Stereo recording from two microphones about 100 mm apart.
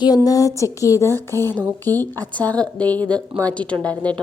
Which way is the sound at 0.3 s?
35° left (ahead or behind).